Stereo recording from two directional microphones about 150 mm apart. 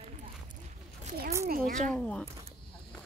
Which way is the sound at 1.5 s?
70° right (ahead or behind).